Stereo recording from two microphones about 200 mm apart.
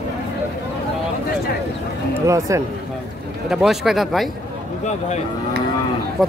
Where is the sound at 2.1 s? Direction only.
15° right (ahead or behind).